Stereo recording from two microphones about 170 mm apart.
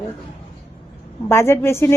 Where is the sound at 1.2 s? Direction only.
15° left (ahead or behind).